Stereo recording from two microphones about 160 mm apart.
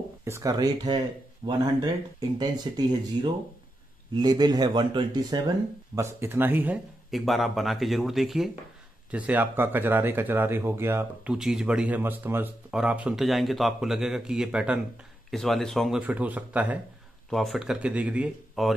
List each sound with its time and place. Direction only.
0.2 s speech: 20° right (ahead or behind)
4.2 s speech: 25° right (ahead or behind)
5.9 s speech: 15° right (ahead or behind)
7.1 s speech: centre (ahead or behind)
11.3 s speech: 5° right (ahead or behind)
16.0 s speech: 10° right (ahead or behind)
17.3 s speech: centre (ahead or behind)